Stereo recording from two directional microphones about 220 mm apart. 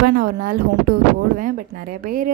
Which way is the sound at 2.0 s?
40° right (ahead or behind).